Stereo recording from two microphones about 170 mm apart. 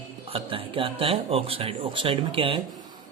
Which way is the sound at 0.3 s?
30° right (ahead or behind).